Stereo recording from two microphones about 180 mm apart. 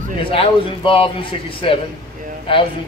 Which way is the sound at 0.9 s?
30° left (ahead or behind).